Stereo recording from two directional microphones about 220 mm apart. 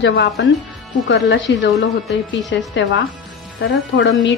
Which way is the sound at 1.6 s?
50° left (ahead or behind).